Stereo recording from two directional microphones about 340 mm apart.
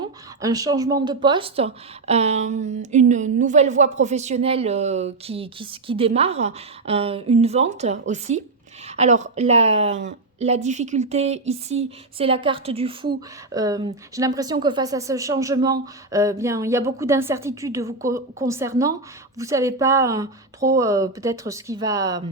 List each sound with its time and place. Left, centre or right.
0.0 s speech: centre